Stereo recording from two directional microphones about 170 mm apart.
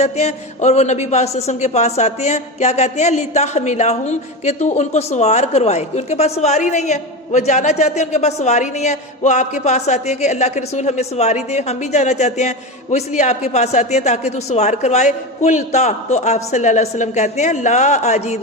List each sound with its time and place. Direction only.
0.0 s a man's voice: 40° left (ahead or behind)